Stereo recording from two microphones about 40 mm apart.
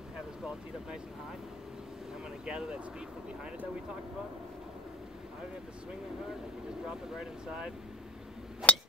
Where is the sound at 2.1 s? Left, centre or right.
Right.